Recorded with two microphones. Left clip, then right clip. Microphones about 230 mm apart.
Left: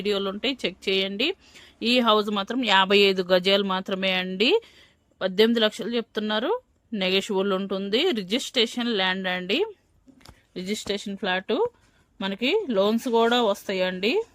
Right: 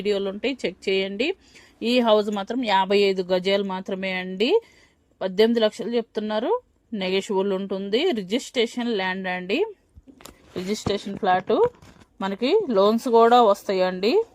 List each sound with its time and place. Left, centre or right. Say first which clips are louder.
0.0 s a woman's voice: right 1 dB; centre
10.2 s speech: right 3 dB; left
12.7 s speech: right 6 dB; centre